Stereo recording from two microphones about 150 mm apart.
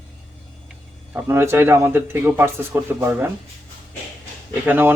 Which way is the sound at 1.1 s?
15° right (ahead or behind).